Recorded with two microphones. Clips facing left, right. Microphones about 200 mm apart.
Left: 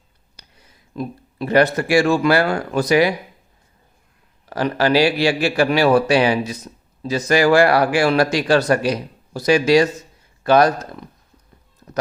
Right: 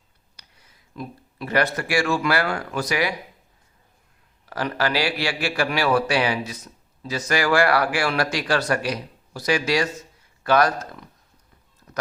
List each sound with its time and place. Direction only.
0.9 s speech: 25° left (ahead or behind)
4.4 s speech: 25° left (ahead or behind)
11.8 s a sound: 30° left (ahead or behind)